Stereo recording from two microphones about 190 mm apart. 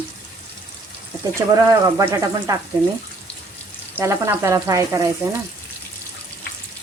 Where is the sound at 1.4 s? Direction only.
20° right (ahead or behind).